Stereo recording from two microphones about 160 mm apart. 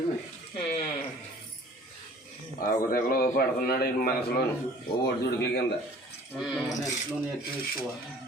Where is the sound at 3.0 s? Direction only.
65° left (ahead or behind).